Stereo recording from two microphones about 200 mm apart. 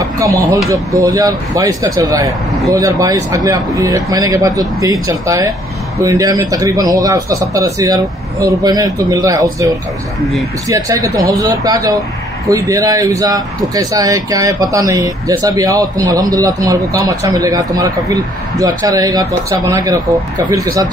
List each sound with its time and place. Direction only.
0.0 s a sound: 15° right (ahead or behind)
1.0 s speech: 15° right (ahead or behind)
10.7 s speech: 15° right (ahead or behind)